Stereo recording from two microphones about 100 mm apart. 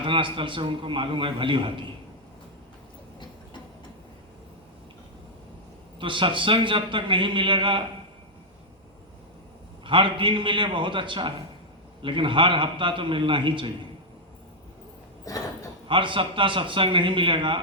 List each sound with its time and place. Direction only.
0.0 s a man's voice: 60° right (ahead or behind)
6.0 s a man's voice: 55° right (ahead or behind)
9.8 s a man's voice: 55° right (ahead or behind)
15.3 s speech: 35° left (ahead or behind)
15.9 s a man's voice: 55° right (ahead or behind)